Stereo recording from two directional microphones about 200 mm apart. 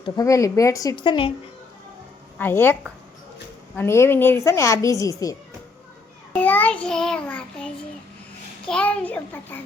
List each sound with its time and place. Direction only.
0.0 s a woman's voice: 15° left (ahead or behind)
2.4 s a woman's voice: 10° left (ahead or behind)
3.8 s a woman's voice: 15° left (ahead or behind)
6.4 s a woman's voice: 10° left (ahead or behind)